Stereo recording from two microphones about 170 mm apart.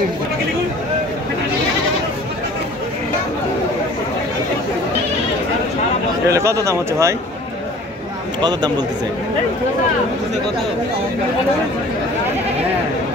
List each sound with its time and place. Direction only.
6.2 s speech: 15° right (ahead or behind)
8.4 s speech: 25° right (ahead or behind)